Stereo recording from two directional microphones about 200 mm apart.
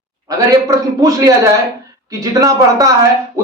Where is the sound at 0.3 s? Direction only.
15° right (ahead or behind).